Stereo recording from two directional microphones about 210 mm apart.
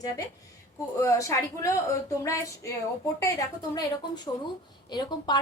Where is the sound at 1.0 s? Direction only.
15° left (ahead or behind).